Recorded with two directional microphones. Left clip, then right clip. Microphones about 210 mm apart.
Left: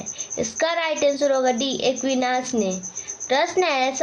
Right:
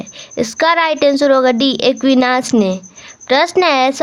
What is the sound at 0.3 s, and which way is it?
A woman's voice, 40° right (ahead or behind).